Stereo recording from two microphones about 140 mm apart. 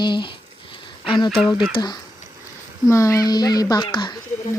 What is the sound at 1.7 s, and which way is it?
Speech, 30° left (ahead or behind).